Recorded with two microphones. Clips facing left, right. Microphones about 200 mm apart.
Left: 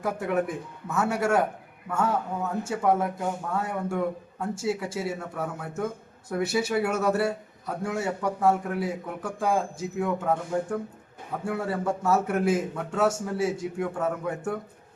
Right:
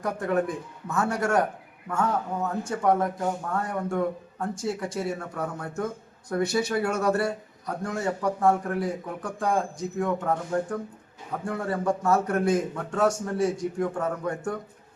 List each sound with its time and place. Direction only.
0.0 s a man's voice: 5° left (ahead or behind)
2.6 s a man's voice: 5° left (ahead or behind)